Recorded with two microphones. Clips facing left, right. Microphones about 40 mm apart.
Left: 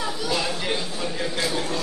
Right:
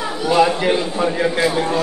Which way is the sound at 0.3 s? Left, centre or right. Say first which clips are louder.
Right 13 dB; right.